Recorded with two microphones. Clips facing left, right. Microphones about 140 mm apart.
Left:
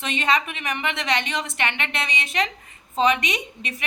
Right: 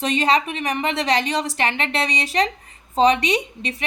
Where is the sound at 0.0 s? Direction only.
35° right (ahead or behind).